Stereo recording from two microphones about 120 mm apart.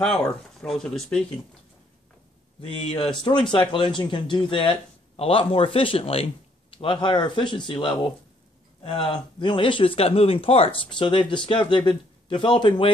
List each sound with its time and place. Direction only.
0.0 s speech: 5° left (ahead or behind)
2.9 s speech: 45° left (ahead or behind)